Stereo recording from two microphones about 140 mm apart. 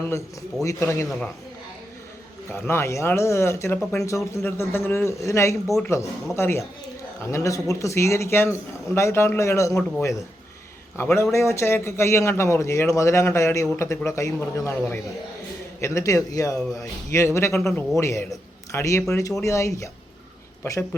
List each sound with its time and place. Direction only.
0.6 s a man's voice: 20° left (ahead or behind)
2.5 s a man's voice: 20° left (ahead or behind)